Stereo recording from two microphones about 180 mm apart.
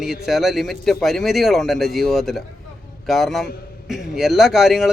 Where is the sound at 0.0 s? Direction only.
Centre (ahead or behind).